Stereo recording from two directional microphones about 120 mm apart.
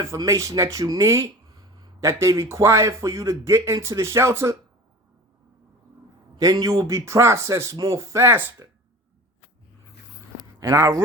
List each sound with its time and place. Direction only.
0.0 s speech: 25° right (ahead or behind)
6.3 s speech: 30° right (ahead or behind)
10.6 s speech: 30° right (ahead or behind)